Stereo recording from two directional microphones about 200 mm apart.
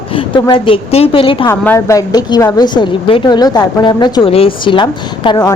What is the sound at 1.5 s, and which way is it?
A woman's voice, 15° left (ahead or behind).